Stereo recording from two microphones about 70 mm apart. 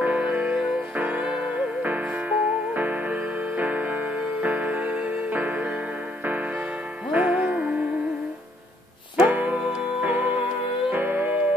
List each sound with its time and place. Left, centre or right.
0.0 s music: right
7.1 s music: centre
9.3 s music: right